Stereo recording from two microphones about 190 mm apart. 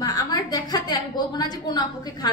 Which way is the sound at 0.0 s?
20° left (ahead or behind).